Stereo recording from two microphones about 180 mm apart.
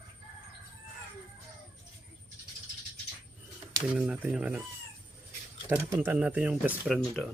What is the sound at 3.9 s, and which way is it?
Speech, 5° right (ahead or behind).